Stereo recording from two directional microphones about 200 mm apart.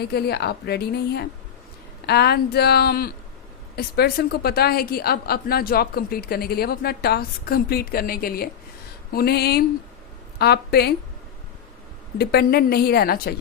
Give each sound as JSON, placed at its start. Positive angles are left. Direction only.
{"t": 0.0, "sound": "a woman's voice", "side_deg": 55}
{"t": 12.1, "sound": "a woman's voice", "side_deg": 55}